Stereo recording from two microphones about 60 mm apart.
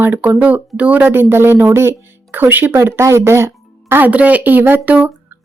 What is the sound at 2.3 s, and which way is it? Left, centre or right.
Speech, right.